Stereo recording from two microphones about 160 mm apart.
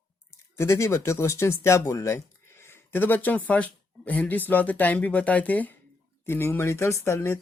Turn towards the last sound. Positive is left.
turn(degrees=15)  # may be behind; listen again after turning